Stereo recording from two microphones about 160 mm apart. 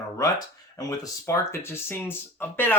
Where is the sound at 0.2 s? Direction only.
20° left (ahead or behind).